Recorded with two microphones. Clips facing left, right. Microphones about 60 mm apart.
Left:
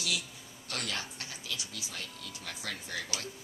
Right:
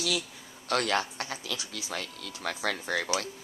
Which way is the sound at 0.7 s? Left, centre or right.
Right.